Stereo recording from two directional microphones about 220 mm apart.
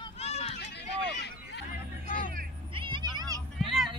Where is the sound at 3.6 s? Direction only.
Centre (ahead or behind).